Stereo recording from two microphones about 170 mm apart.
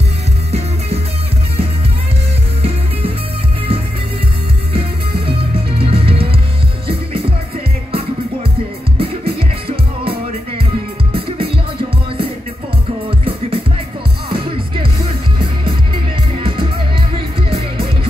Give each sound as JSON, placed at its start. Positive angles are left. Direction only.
{"t": 5.8, "sound": "music", "side_deg": -35}
{"t": 8.9, "sound": "music", "side_deg": -30}
{"t": 11.1, "sound": "music", "side_deg": -30}
{"t": 14.3, "sound": "music", "side_deg": -30}
{"t": 16.3, "sound": "music", "side_deg": -30}